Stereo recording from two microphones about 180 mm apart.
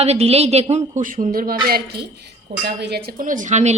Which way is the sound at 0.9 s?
50° right (ahead or behind).